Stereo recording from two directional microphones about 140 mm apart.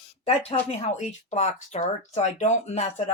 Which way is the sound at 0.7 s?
55° left (ahead or behind).